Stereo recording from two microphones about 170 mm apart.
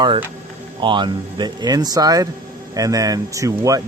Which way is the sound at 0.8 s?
30° right (ahead or behind).